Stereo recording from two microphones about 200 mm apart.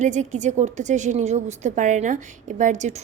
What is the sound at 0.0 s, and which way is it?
A woman's voice, 35° right (ahead or behind).